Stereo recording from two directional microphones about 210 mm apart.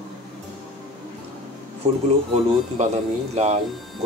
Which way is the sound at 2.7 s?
30° right (ahead or behind).